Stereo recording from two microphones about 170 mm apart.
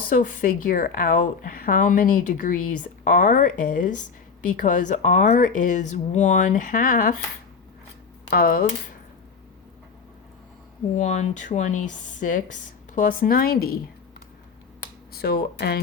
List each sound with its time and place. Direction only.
0.1 s a woman's voice: 55° left (ahead or behind)
8.3 s a woman's voice: 60° left (ahead or behind)
10.9 s a woman's voice: 45° left (ahead or behind); by 13.7 s 65° left (ahead or behind)
15.1 s speech: 70° left (ahead or behind)